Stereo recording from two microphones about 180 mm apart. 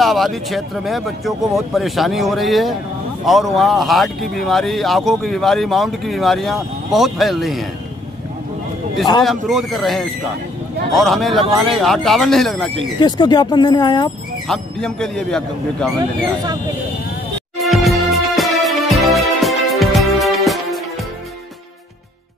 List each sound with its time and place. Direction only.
0.0 s speech: centre (ahead or behind)
9.5 s speech: centre (ahead or behind)
13.0 s speech: 25° left (ahead or behind)
14.5 s speech: 5° left (ahead or behind)
17.6 s music: centre (ahead or behind)